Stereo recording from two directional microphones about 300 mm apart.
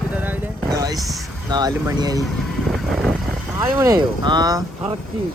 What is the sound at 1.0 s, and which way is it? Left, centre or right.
Speech, centre.